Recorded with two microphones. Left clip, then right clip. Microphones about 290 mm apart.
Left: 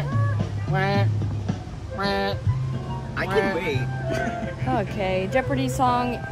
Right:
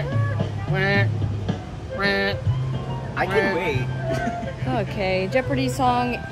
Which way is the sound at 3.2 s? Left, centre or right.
Centre.